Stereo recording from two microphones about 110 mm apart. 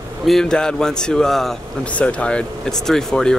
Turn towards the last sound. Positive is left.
turn(degrees=5)  # may be behind; listen again after turning